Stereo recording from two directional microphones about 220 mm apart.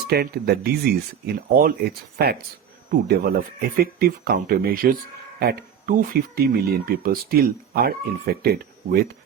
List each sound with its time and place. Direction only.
0.1 s speech: 45° right (ahead or behind)